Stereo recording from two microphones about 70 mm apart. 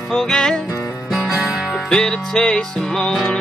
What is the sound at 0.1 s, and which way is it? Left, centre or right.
Music, centre.